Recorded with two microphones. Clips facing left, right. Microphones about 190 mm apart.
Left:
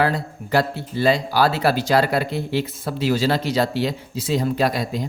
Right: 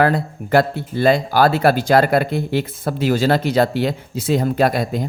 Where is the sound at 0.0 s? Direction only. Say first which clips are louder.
Right 4 dB; 55° right (ahead or behind).